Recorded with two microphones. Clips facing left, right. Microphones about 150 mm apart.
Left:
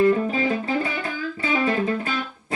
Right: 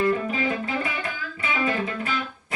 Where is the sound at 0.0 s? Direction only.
30° left (ahead or behind).